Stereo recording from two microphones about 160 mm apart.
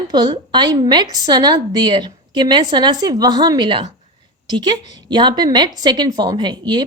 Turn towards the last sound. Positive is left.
turn(degrees=-25)  # may be behind; listen again after turning